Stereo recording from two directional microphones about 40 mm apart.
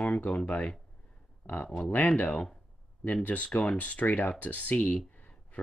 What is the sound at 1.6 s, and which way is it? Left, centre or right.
Speech, left.